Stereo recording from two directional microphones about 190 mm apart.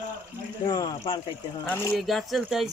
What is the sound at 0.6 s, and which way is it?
Speech, 20° left (ahead or behind).